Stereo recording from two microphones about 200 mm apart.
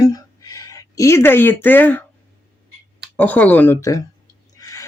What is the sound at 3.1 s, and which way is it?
Speech, 10° left (ahead or behind).